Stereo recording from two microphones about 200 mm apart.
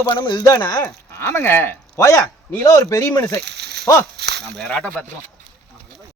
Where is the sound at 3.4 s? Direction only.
55° right (ahead or behind).